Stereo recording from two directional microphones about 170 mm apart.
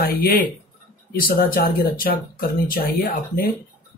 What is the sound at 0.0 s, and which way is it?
Speech, 65° left (ahead or behind).